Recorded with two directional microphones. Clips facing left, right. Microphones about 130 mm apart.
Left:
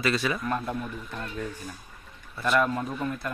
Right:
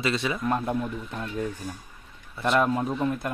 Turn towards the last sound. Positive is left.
turn(degrees=-20)  # may be behind; listen again after turning